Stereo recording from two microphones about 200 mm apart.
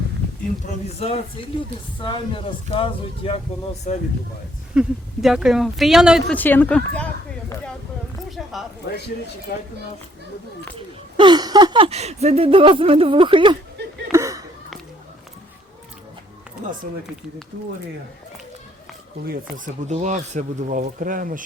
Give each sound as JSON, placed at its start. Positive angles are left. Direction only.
{"t": 0.9, "sound": "speech", "side_deg": 30}
{"t": 2.6, "sound": "speech", "side_deg": 25}
{"t": 4.7, "sound": "speech", "side_deg": -5}
{"t": 8.4, "sound": "zipper", "side_deg": 0}
{"t": 8.8, "sound": "speech", "side_deg": 60}
{"t": 9.5, "sound": "speech", "side_deg": 50}
{"t": 10.8, "sound": "speech", "side_deg": -25}
{"t": 14.1, "sound": "a sound", "side_deg": -15}
{"t": 19.6, "sound": "speech", "side_deg": -35}